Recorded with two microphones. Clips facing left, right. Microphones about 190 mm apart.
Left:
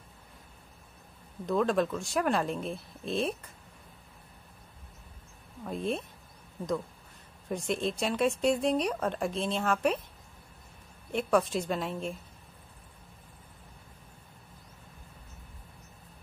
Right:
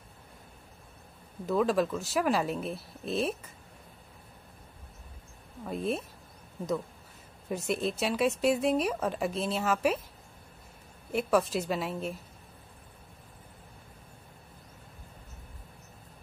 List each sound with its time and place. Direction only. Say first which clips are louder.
1.4 s speech: even; 5° right (ahead or behind)
5.7 s speech: right 1 dB; 5° right (ahead or behind)
7.4 s speech: even; 5° right (ahead or behind)
11.1 s speech: even; 5° right (ahead or behind)